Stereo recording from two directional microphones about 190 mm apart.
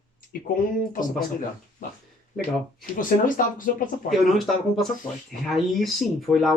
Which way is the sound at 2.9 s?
45° left (ahead or behind).